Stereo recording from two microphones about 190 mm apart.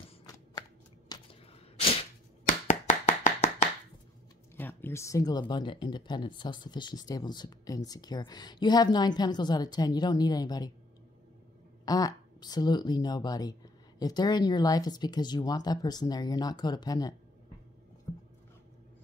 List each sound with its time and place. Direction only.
0.6 s shuffling cards: 20° left (ahead or behind)
2.4 s chopping: 40° left (ahead or behind)
4.6 s speech: 10° left (ahead or behind)
11.8 s speech: 20° left (ahead or behind)